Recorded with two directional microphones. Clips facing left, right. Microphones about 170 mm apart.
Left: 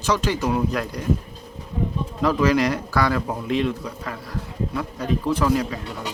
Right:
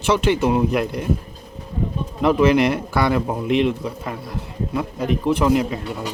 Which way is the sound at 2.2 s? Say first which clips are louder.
Right 4 dB; 25° right (ahead or behind).